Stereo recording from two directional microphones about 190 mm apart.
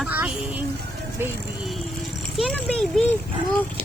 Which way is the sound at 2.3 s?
5° left (ahead or behind).